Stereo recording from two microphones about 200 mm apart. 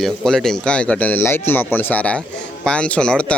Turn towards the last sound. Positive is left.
turn(degrees=5)  # may be behind; listen again after turning